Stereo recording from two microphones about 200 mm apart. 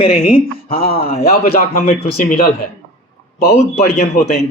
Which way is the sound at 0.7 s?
50° left (ahead or behind).